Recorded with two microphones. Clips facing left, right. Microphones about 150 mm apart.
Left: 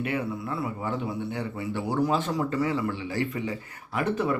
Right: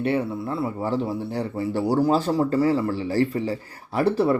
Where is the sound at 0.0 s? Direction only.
30° right (ahead or behind).